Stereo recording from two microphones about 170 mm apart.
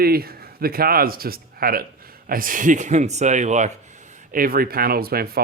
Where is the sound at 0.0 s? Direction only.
65° right (ahead or behind); by 3.7 s 45° right (ahead or behind).